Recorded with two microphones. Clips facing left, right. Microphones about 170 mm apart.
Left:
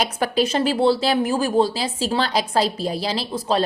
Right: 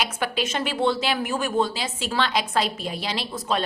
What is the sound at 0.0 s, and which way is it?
A woman's voice, 40° left (ahead or behind).